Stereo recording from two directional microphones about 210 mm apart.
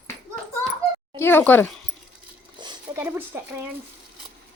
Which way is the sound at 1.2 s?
10° left (ahead or behind).